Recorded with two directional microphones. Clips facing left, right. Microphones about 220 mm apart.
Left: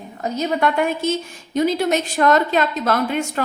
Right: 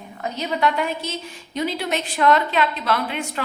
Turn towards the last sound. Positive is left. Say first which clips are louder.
# left 4 dB
turn(degrees=45)  # may be behind; listen again after turning